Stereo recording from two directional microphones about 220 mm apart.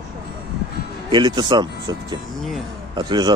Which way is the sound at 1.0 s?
20° right (ahead or behind).